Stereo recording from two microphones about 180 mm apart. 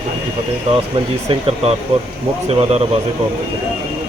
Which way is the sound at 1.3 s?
35° right (ahead or behind).